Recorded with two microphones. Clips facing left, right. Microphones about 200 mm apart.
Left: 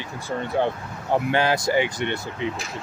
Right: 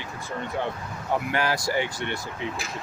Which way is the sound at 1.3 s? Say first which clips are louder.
Left 6 dB; 25° left (ahead or behind).